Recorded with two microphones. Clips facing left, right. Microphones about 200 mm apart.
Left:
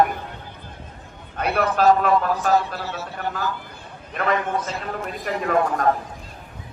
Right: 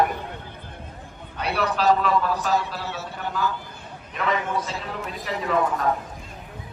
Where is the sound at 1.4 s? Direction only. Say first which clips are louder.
Left 4 dB; 50° left (ahead or behind).